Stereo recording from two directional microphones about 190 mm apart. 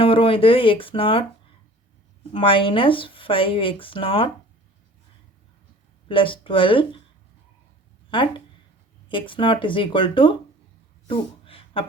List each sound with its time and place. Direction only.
0.0 s speech: 30° left (ahead or behind)
2.3 s speech: 25° left (ahead or behind)
6.1 s speech: 25° left (ahead or behind)
8.1 s speech: 25° left (ahead or behind)
11.1 s a sound: 30° left (ahead or behind)